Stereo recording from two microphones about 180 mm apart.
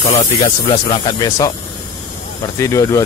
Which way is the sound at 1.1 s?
20° left (ahead or behind).